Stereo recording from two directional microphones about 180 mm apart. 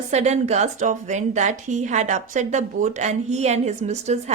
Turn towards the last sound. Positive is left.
turn(degrees=-40)  # may be behind; listen again after turning